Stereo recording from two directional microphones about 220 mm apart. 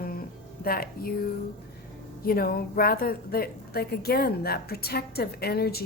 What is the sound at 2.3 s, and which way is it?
A woman's voice, 45° left (ahead or behind).